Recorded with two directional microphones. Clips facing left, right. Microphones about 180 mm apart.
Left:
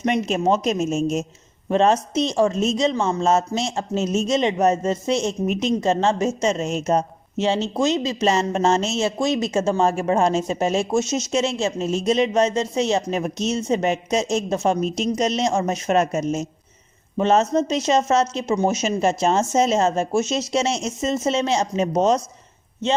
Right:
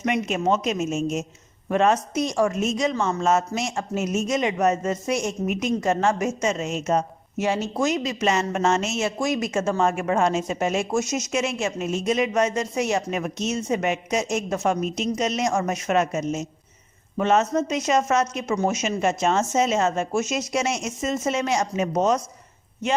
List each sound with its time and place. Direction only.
0.0 s a woman's voice: 35° left (ahead or behind)